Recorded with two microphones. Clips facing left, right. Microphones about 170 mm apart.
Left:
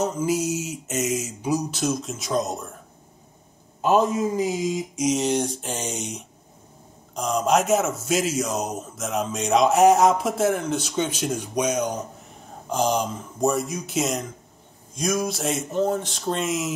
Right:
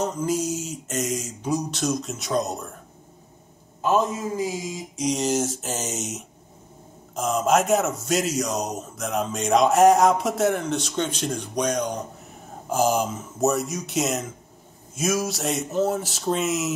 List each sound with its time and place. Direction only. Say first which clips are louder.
0.0 s speech: left 1 dB; 5° left (ahead or behind)
3.8 s a man's voice: left 3 dB; 20° left (ahead or behind)
5.0 s speech: left 1 dB; centre (ahead or behind)
12.6 s speech: right 1 dB; 5° right (ahead or behind)